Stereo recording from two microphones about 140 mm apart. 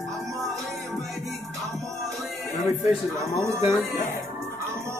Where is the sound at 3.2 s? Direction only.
20° right (ahead or behind).